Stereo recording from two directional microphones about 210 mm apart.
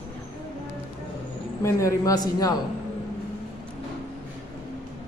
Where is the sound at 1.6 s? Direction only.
15° left (ahead or behind).